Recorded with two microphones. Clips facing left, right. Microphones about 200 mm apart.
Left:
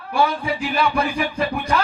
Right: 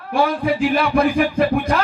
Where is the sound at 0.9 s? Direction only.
55° right (ahead or behind).